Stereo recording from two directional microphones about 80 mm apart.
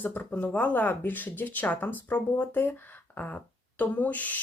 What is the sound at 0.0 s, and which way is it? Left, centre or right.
Speech, left.